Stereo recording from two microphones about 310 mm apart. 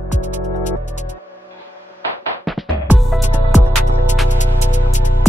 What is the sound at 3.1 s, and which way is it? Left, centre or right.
Music, left.